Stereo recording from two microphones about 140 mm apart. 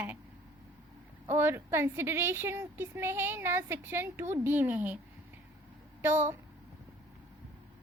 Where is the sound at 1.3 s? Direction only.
20° right (ahead or behind).